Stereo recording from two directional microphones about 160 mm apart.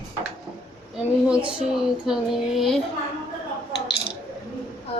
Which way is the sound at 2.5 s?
Centre (ahead or behind).